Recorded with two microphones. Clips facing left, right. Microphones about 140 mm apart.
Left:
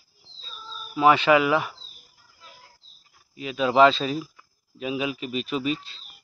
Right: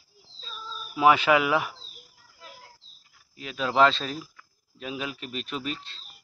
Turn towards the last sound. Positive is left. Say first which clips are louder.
# left 7 dB
turn(degrees=5)  # may be behind; listen again after turning